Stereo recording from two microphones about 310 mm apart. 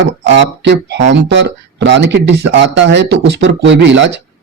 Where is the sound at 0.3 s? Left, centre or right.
Right.